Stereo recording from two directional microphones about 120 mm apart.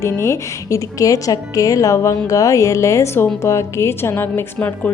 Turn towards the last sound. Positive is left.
turn(degrees=15)  # may be behind; listen again after turning